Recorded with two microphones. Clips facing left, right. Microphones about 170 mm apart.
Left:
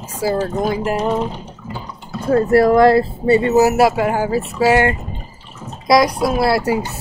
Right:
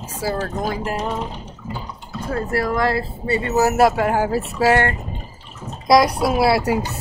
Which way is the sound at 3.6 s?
5° left (ahead or behind).